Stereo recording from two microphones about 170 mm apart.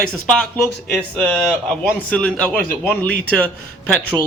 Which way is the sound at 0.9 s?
10° left (ahead or behind).